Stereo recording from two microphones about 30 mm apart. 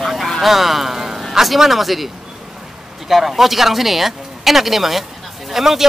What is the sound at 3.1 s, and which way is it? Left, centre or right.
Speech, centre.